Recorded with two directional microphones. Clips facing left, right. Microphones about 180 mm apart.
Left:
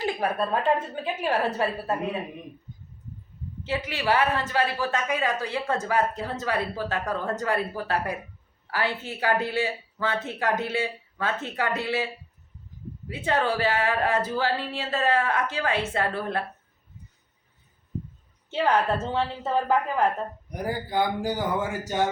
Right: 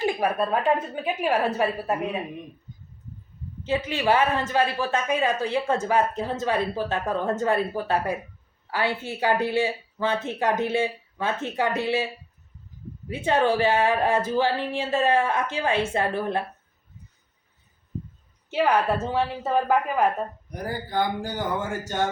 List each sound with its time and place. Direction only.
0.3 s speech: 10° right (ahead or behind)
3.8 s speech: 20° right (ahead or behind)
13.2 s speech: 20° right (ahead or behind)
18.5 s speech: 10° right (ahead or behind)
20.5 s speech: 10° left (ahead or behind)